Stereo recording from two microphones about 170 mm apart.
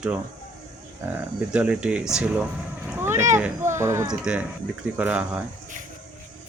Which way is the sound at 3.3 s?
15° right (ahead or behind).